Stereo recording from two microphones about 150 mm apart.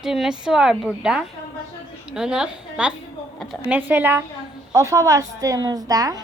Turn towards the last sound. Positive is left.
turn(degrees=-25)  # may be behind; listen again after turning